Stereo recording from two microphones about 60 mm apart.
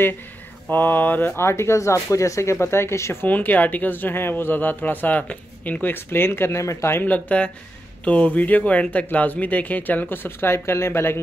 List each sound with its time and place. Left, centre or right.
0.7 s speech: left
1.4 s speech: left
3.3 s speech: left
6.6 s speech: left
7.1 s speech: left